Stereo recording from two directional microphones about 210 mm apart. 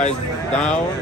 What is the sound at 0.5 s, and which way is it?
Speech, 5° left (ahead or behind).